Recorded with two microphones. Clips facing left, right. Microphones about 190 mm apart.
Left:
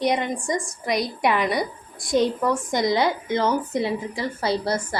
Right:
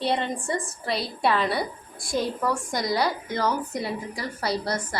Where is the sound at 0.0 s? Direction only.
15° left (ahead or behind).